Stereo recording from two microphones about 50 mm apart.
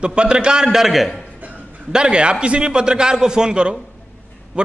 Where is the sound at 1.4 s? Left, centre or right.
Right.